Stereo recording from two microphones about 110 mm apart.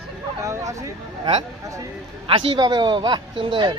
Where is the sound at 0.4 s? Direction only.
30° right (ahead or behind).